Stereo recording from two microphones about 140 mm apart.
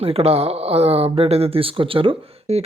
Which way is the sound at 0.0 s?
45° right (ahead or behind).